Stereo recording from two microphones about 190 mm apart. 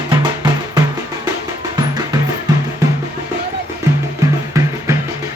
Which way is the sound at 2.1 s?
25° right (ahead or behind).